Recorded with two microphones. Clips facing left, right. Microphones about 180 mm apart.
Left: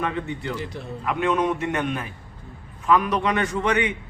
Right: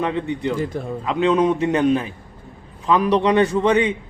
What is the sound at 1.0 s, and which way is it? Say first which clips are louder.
A man's voice: right 5 dB; 25° right (ahead or behind).